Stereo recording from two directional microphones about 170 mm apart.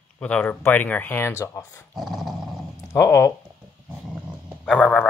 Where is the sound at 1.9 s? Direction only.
Centre (ahead or behind).